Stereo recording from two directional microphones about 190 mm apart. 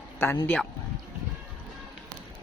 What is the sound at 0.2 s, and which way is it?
Speech, 10° left (ahead or behind).